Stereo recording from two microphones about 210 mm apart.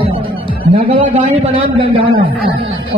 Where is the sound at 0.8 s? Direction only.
25° right (ahead or behind).